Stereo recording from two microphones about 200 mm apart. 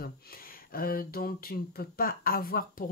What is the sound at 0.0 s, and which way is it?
Speech, 50° left (ahead or behind).